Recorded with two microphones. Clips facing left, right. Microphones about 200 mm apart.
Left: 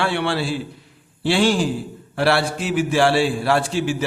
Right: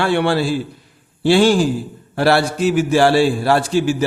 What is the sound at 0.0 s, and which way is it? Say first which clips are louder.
A man's voice: right 5 dB; 45° right (ahead or behind).